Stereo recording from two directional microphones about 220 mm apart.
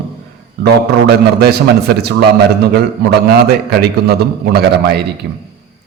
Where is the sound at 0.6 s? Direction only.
45° right (ahead or behind).